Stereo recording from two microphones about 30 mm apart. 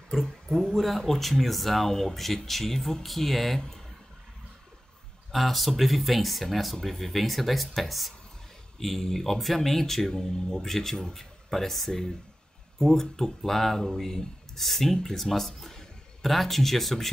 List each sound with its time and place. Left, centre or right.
0.2 s speech: centre
5.3 s speech: centre
10.1 s a man's voice: left